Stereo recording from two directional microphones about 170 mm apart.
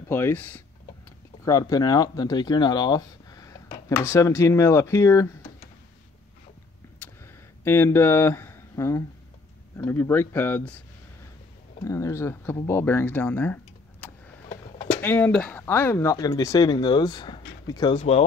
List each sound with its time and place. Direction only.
0.1 s speech: 10° left (ahead or behind)
1.4 s speech: 20° left (ahead or behind)
7.6 s speech: 15° left (ahead or behind)
11.8 s speech: 20° left (ahead or behind)
15.0 s speech: 10° left (ahead or behind); by 18.0 s 25° left (ahead or behind)